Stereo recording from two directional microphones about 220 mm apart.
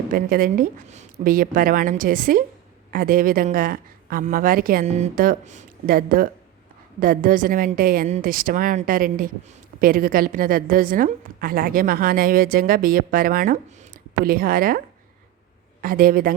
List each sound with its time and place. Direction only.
0.1 s a woman's voice: 40° right (ahead or behind)
15.8 s a woman's voice: 40° right (ahead or behind)